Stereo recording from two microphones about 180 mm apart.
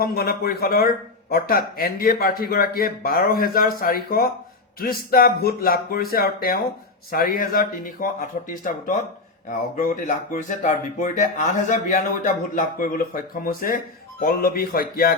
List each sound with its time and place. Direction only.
0.0 s speech: 60° left (ahead or behind)